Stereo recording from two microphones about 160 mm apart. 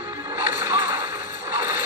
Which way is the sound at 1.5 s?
15° right (ahead or behind).